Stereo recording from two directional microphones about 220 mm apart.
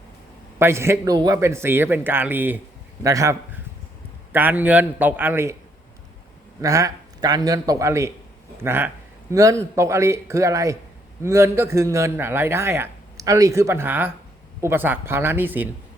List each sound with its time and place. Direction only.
0.6 s a man's voice: 10° right (ahead or behind)
6.6 s a man's voice: 15° right (ahead or behind)